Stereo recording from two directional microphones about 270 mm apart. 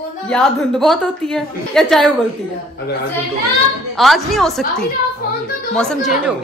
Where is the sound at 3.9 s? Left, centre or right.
Centre.